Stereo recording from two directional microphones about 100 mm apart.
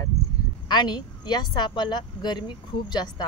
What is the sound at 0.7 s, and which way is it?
Speech, 50° left (ahead or behind).